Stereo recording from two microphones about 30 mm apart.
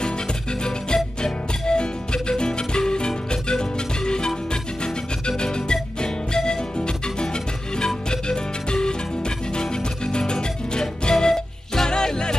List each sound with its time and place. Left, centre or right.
0.9 s music: left
7.8 s music: left
10.1 s music: left